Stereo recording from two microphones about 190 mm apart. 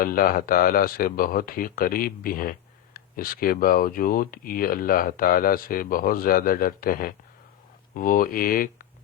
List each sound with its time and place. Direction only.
0.0 s speech: 50° left (ahead or behind)